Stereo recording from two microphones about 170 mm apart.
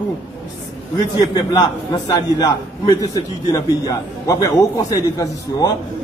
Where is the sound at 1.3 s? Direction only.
25° left (ahead or behind).